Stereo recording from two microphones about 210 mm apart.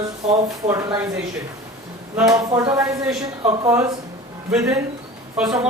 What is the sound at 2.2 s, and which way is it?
A woman's voice, 15° right (ahead or behind).